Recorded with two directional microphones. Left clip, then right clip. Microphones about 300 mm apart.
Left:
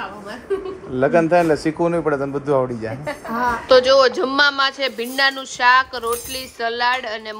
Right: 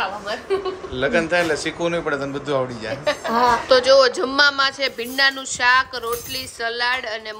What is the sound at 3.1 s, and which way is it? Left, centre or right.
Speech, right.